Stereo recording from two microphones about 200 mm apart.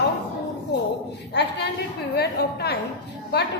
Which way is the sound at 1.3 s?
55° left (ahead or behind).